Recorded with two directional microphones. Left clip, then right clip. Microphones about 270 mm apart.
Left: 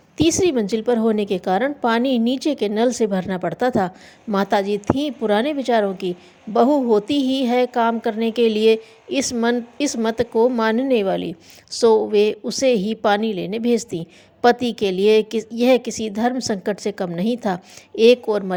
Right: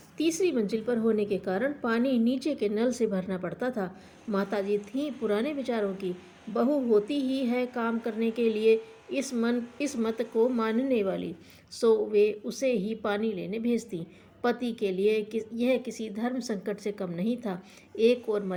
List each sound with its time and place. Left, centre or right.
0.2 s a woman's voice: left